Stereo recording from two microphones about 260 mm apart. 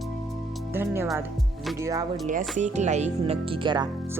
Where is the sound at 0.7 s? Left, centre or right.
Centre.